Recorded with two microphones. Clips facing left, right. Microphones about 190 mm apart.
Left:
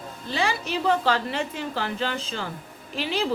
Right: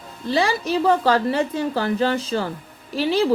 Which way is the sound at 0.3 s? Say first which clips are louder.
Right 6 dB; 35° right (ahead or behind).